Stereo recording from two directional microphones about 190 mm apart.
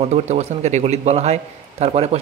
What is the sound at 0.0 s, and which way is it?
A man's voice, 35° right (ahead or behind).